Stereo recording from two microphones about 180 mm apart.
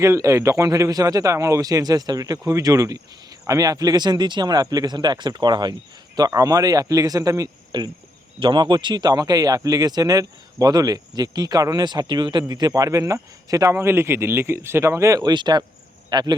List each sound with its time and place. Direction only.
0.0 s a man's voice: 15° right (ahead or behind)